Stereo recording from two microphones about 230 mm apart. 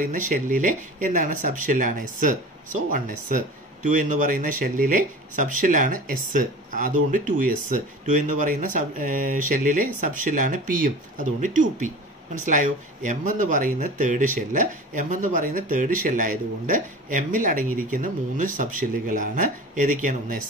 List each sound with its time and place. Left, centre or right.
0.0 s speech: right